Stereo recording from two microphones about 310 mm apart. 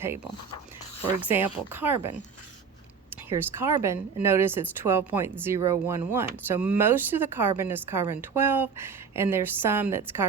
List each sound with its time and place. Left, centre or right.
1.0 s speech: centre